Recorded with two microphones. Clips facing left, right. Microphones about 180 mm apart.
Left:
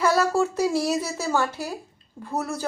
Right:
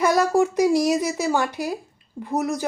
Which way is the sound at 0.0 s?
15° right (ahead or behind).